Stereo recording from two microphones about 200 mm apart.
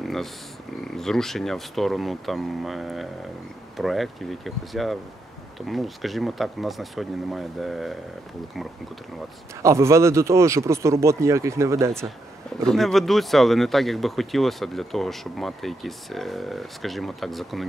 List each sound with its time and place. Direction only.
0.0 s a sound: centre (ahead or behind)
0.8 s speech: centre (ahead or behind)
9.6 s speech: 15° right (ahead or behind)
12.5 s speech: centre (ahead or behind)